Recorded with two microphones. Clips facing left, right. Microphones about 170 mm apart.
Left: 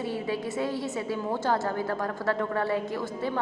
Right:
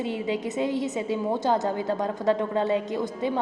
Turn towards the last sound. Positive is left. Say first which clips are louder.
# right 3 dB
turn(degrees=-20)  # may be behind; listen again after turning